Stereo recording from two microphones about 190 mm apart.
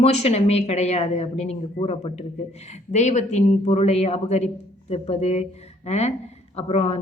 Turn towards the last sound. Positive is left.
turn(degrees=35)  # may be behind; listen again after turning